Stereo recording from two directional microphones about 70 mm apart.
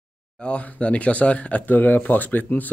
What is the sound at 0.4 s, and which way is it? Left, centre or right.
Speech, centre.